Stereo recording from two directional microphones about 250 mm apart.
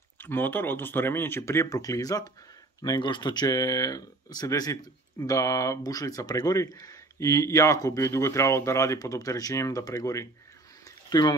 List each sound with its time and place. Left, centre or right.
0.2 s speech: centre